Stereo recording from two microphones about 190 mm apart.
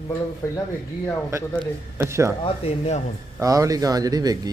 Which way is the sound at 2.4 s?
35° left (ahead or behind).